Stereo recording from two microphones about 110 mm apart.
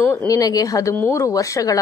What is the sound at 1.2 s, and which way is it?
Speech, 30° left (ahead or behind).